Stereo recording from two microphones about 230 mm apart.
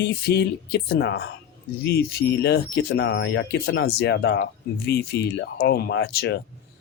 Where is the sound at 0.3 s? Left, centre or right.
Left.